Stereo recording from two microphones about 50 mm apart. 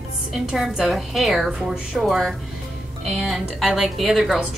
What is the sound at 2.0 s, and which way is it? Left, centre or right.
Speech, centre.